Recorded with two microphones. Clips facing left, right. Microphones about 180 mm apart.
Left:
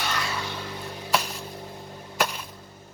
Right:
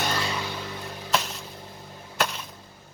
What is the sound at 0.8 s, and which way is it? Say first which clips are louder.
Music: left 1 dB; 10° left (ahead or behind).